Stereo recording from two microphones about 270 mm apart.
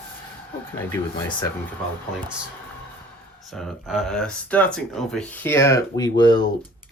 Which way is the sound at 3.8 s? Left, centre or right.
Centre.